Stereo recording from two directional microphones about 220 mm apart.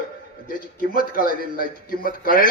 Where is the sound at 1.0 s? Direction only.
40° left (ahead or behind).